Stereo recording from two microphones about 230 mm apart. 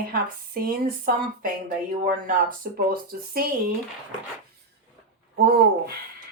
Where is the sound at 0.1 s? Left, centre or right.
Right.